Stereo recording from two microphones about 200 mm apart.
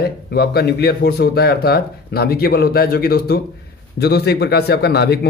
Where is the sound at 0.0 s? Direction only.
50° left (ahead or behind).